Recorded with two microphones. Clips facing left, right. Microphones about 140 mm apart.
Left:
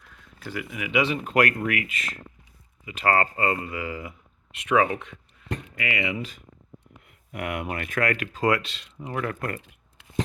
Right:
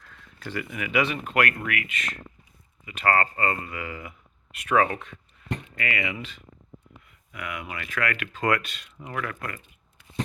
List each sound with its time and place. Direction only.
0.0 s a sound: 10° left (ahead or behind)
1.0 s speech: 30° left (ahead or behind)
4.7 s speech: 15° left (ahead or behind)
7.1 s speech: 55° left (ahead or behind); by 9.4 s 30° left (ahead or behind)